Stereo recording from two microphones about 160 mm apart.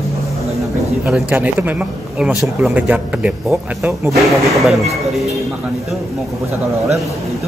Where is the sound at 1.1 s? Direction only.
10° right (ahead or behind).